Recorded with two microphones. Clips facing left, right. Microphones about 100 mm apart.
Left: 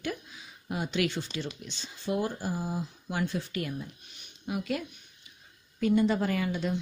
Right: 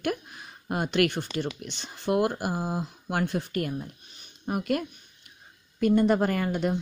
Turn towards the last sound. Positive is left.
turn(degrees=-55)  # may be behind; listen again after turning